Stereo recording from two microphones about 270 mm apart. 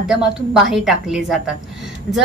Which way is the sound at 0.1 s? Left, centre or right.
Centre.